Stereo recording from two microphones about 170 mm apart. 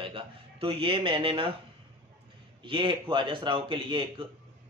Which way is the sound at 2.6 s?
30° right (ahead or behind).